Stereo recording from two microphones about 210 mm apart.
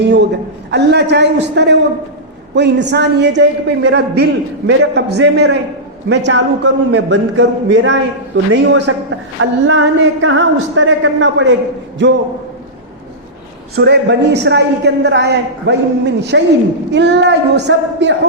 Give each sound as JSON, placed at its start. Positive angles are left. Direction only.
{"t": 0.0, "sound": "a man's voice", "side_deg": -55}
{"t": 13.7, "sound": "a woman's voice", "side_deg": -50}